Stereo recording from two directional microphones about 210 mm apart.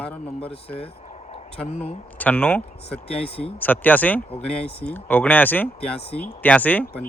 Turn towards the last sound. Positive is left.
turn(degrees=10)  # may be behind; listen again after turning